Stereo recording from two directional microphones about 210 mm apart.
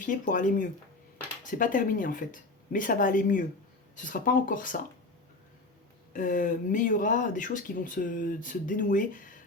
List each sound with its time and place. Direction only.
0.0 s speech: 40° left (ahead or behind)
6.1 s speech: 40° left (ahead or behind)